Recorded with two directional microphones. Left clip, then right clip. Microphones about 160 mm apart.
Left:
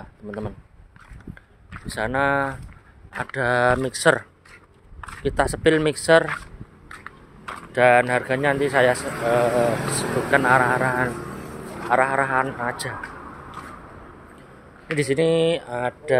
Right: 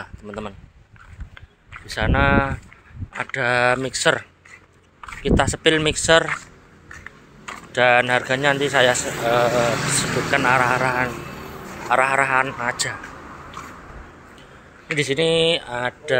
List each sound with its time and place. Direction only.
0.2 s speech: 15° left (ahead or behind)
1.9 s speech: 15° left (ahead or behind)
7.7 s speech: 15° left (ahead or behind)
15.0 s speech: 25° left (ahead or behind)